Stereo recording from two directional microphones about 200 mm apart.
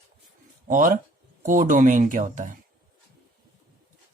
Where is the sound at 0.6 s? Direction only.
40° right (ahead or behind).